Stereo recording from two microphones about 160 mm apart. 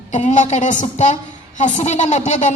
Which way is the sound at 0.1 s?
50° left (ahead or behind).